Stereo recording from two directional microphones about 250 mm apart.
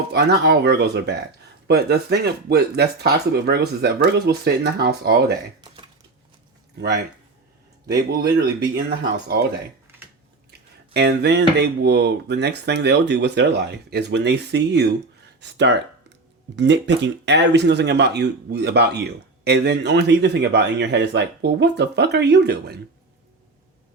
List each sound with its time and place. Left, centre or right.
0.1 s speech: right
6.7 s speech: right
10.9 s a man's voice: right